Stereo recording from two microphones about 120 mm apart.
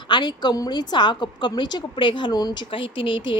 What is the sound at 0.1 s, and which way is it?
A woman's voice, 40° left (ahead or behind).